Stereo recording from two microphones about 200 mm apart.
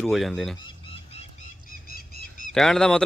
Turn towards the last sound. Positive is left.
turn(degrees=0)  # may be behind; listen again after turning